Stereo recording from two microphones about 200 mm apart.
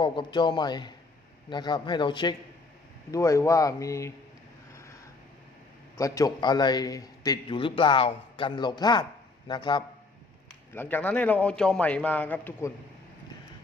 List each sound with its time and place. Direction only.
0.0 s a man's voice: 25° left (ahead or behind)
6.0 s a man's voice: 15° left (ahead or behind)
10.8 s a man's voice: 10° left (ahead or behind)